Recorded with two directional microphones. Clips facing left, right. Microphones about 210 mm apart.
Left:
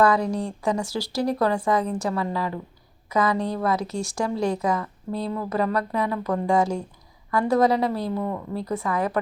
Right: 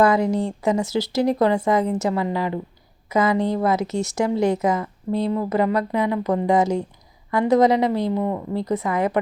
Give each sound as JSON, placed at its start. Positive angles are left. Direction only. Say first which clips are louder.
{"t": 0.0, "sound": "speech", "louder": "right 3 dB", "side_deg": -20}